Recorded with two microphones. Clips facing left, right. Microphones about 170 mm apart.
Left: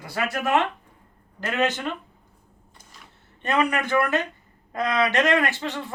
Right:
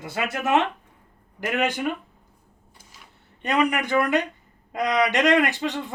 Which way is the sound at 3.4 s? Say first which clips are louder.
Right 1 dB; 15° right (ahead or behind).